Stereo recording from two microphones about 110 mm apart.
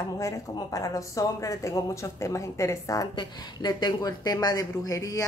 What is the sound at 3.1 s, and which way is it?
Speech, 40° left (ahead or behind).